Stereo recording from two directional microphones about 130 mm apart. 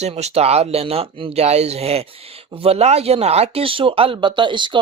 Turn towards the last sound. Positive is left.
turn(degrees=-40)  # may be behind; listen again after turning